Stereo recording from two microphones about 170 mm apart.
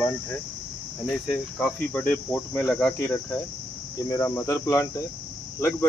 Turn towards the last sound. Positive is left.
turn(degrees=15)  # may be behind; listen again after turning